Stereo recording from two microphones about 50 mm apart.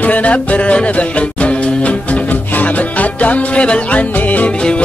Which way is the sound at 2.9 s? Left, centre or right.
Left.